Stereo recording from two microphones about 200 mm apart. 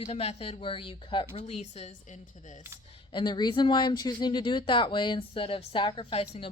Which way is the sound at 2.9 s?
25° left (ahead or behind).